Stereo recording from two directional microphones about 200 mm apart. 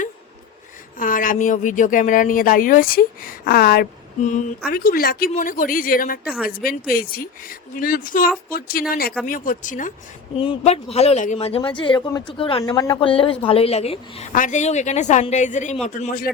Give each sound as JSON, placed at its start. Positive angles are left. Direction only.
{"t": 0.9, "sound": "a woman's voice", "side_deg": 40}
{"t": 4.2, "sound": "a woman's voice", "side_deg": 35}
{"t": 6.2, "sound": "a woman's voice", "side_deg": -5}
{"t": 6.5, "sound": "a woman's voice", "side_deg": 50}
{"t": 10.3, "sound": "speech", "side_deg": 25}